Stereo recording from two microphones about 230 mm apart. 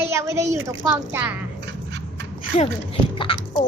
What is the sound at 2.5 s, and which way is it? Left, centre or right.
Speech, left.